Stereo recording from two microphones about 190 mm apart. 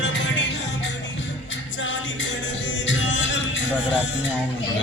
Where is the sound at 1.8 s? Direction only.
75° left (ahead or behind).